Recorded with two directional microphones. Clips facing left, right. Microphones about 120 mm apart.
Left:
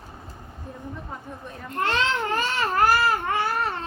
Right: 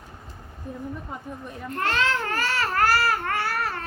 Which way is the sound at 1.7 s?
20° left (ahead or behind).